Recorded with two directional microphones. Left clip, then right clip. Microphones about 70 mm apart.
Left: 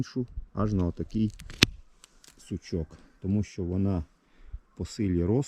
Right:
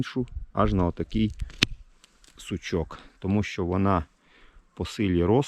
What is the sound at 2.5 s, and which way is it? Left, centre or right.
Speech, left.